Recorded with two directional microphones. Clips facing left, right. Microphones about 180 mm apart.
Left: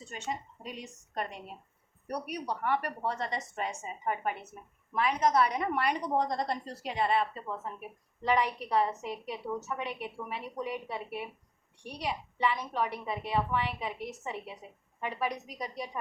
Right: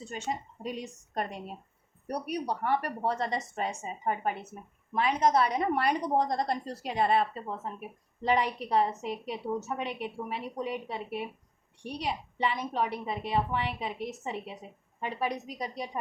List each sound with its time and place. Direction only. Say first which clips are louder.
0.1 s a woman's voice: right 2 dB; 40° right (ahead or behind)